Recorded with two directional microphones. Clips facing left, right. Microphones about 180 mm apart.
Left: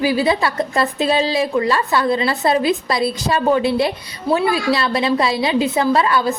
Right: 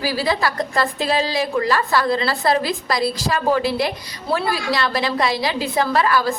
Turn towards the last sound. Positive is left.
turn(degrees=25)  # may be behind; listen again after turning